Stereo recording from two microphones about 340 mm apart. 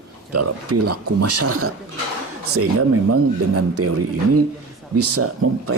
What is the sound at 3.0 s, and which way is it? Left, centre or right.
Speech, right.